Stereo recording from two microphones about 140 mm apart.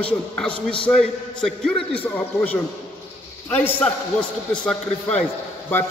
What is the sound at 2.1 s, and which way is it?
A man's voice, 10° left (ahead or behind).